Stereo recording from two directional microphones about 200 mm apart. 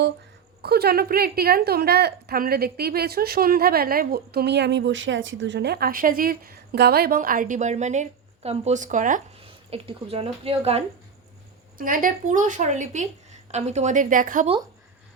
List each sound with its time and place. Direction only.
0.6 s a woman's voice: 50° right (ahead or behind)
9.6 s a woman's voice: 30° right (ahead or behind)
11.8 s a woman's voice: 45° right (ahead or behind)